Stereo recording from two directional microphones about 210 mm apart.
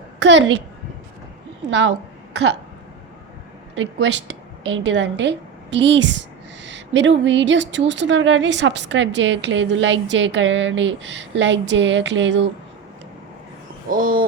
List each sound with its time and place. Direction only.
0.2 s a woman's voice: 60° right (ahead or behind)
3.8 s a woman's voice: 60° right (ahead or behind)
13.9 s a sound: 40° right (ahead or behind)